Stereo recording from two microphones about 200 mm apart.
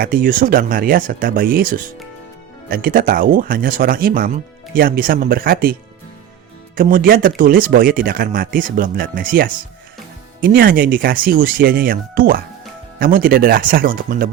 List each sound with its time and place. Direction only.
0.0 s speech: 45° right (ahead or behind)
6.7 s speech: 45° right (ahead or behind)